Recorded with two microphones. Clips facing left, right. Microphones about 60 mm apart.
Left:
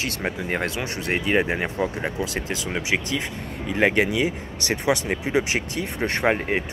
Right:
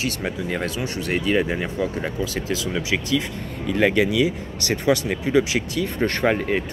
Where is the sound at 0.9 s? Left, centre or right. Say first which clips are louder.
Right 1 dB; left.